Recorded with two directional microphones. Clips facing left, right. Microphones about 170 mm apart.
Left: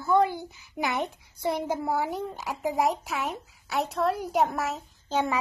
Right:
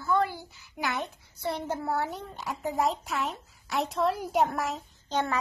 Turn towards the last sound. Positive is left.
turn(degrees=10)  # may be behind; listen again after turning